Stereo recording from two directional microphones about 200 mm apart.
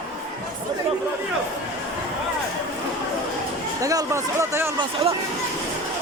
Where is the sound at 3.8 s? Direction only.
15° right (ahead or behind).